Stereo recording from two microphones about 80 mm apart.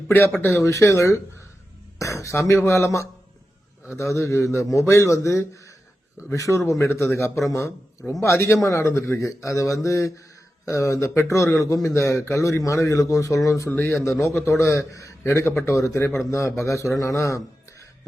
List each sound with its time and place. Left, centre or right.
0.1 s speech: left
0.6 s a man's voice: left
13.7 s speech: left
14.0 s a man's voice: left